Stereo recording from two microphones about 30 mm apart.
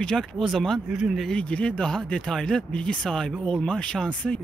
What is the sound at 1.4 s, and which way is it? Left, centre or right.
Speech, left.